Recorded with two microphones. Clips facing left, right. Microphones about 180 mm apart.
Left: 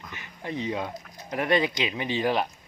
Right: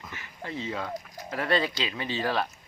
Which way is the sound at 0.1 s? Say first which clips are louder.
Left 4 dB; 20° left (ahead or behind).